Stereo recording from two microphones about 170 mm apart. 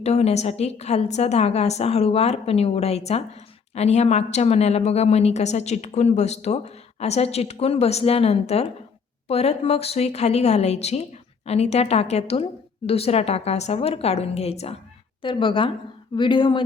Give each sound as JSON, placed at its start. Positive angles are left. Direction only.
{"t": 0.0, "sound": "a woman's voice", "side_deg": 40}